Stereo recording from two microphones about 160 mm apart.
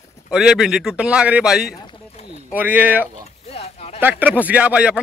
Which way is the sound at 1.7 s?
30° left (ahead or behind).